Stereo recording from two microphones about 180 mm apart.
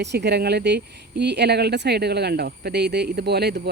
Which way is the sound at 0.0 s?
70° right (ahead or behind).